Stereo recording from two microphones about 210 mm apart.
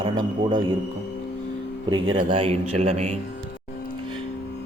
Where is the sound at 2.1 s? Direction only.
25° right (ahead or behind).